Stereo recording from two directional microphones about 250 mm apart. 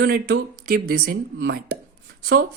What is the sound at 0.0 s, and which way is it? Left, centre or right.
Speech, right.